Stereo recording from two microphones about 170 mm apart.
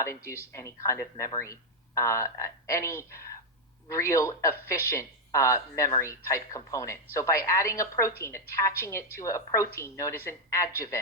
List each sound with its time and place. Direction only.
0.5 s a woman's voice: 20° left (ahead or behind)